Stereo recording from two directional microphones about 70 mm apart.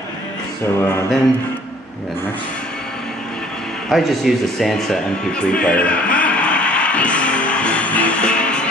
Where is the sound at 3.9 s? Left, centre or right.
Centre.